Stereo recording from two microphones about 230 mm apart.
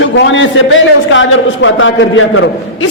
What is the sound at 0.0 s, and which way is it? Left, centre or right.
A man's voice, left.